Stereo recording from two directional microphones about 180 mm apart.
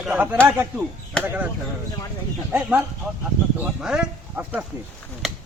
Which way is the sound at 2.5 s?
10° right (ahead or behind).